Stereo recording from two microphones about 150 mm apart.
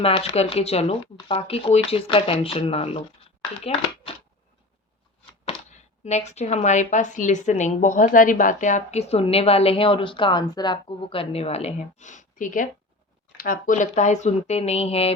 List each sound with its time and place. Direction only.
0.0 s speech: 40° left (ahead or behind)
5.5 s speech: 50° left (ahead or behind)
13.3 s speech: 70° left (ahead or behind); by 15.1 s 40° left (ahead or behind)